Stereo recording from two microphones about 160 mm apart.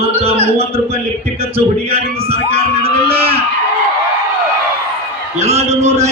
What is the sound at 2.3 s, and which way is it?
Crowd, 40° right (ahead or behind).